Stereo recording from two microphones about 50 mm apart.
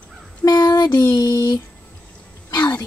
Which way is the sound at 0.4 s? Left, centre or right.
Left.